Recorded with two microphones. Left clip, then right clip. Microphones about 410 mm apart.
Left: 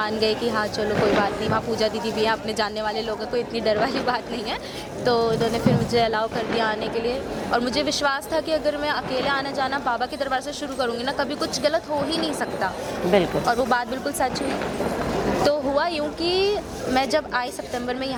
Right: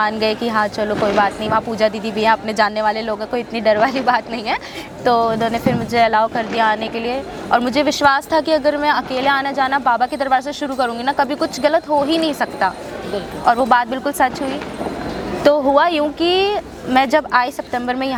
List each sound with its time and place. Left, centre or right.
0.0 s speech: right
15.4 s speech: right